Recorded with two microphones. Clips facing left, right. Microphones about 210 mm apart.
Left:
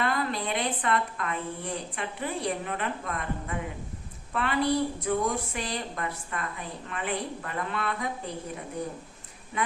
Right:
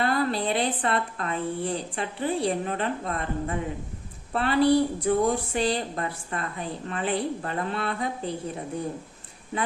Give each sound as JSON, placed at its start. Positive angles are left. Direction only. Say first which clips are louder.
{"t": 0.0, "sound": "speech", "louder": "right 4 dB", "side_deg": -35}